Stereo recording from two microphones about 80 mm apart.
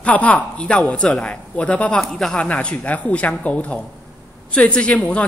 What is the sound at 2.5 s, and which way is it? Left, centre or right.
A man's voice, centre.